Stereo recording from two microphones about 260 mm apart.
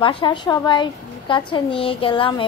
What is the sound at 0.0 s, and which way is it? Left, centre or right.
A woman's voice, centre.